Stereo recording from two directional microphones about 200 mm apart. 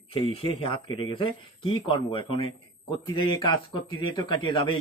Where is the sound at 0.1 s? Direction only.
25° left (ahead or behind).